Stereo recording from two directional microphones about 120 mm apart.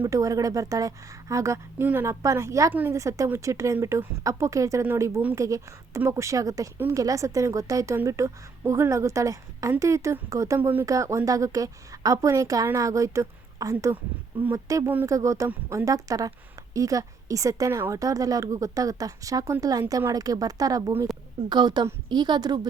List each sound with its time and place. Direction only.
0.0 s a woman's voice: 25° right (ahead or behind)
10.6 s speech: 15° right (ahead or behind)
10.8 s a woman's voice: 25° right (ahead or behind)